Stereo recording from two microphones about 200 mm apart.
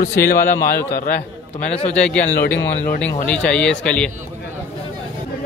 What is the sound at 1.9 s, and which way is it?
Speech, 5° left (ahead or behind).